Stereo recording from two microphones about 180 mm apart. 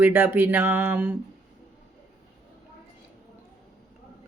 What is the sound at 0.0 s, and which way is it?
Speech, 10° right (ahead or behind).